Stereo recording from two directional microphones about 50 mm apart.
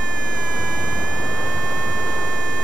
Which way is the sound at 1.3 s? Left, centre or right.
Left.